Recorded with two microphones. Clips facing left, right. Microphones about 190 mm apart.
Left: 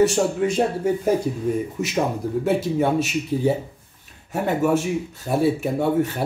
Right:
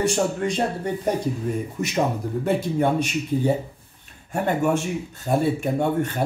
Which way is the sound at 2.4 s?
5° left (ahead or behind).